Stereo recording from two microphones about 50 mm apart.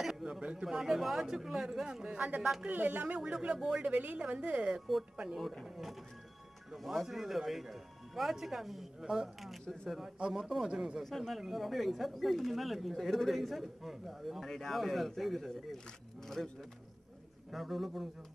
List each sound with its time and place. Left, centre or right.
0.0 s a sound: centre
0.4 s a woman's voice: right
0.7 s speech: centre
2.1 s a woman's voice: right
3.3 s speech: centre
3.8 s a woman's voice: right
6.8 s speech: centre
9.4 s speech: centre
10.1 s a woman's voice: centre
10.4 s speech: centre
11.1 s speech: centre